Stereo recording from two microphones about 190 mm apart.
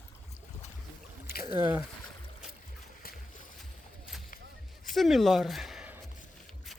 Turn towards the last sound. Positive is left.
turn(degrees=-5)  # may be behind; listen again after turning